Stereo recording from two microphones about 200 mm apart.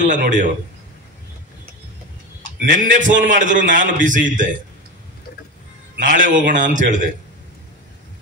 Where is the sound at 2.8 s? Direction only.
40° right (ahead or behind).